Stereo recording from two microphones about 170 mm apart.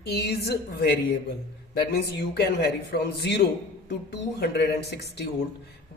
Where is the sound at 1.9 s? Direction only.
75° left (ahead or behind).